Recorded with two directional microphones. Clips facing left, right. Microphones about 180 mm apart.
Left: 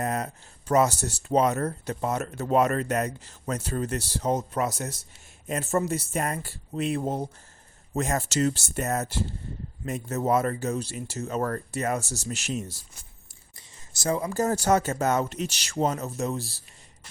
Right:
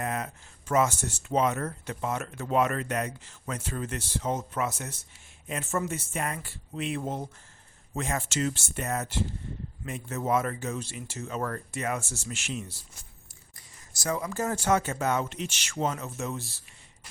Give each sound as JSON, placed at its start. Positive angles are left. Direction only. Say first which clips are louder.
{"t": 0.0, "sound": "a sound", "louder": "left 3 dB", "side_deg": 40}
{"t": 0.7, "sound": "speech", "louder": "left 3 dB", "side_deg": 40}
{"t": 13.6, "sound": "speech", "louder": "left 4 dB", "side_deg": 30}